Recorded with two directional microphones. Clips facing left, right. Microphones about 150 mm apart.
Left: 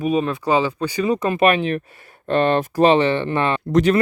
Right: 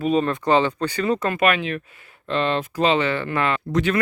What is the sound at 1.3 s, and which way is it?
Speech, 30° left (ahead or behind).